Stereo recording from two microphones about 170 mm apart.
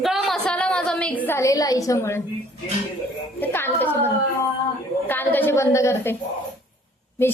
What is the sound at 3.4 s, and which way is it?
A woman's voice, 10° left (ahead or behind).